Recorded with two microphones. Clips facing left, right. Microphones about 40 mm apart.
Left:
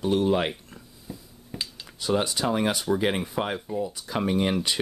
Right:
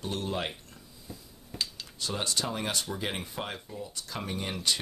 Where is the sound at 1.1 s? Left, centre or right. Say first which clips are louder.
Left 5 dB; centre.